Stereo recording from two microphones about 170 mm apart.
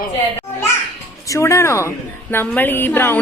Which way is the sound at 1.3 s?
15° left (ahead or behind).